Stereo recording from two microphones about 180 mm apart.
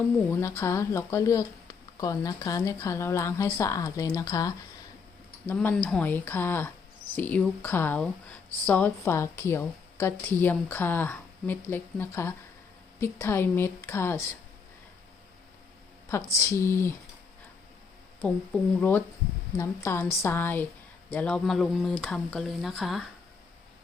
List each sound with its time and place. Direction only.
0.3 s speech: 15° left (ahead or behind)
5.5 s speech: 10° left (ahead or behind)
16.0 s speech: 15° left (ahead or behind)
18.8 s speech: 10° left (ahead or behind)